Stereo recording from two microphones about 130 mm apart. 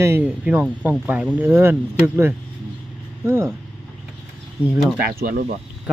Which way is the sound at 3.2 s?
20° right (ahead or behind).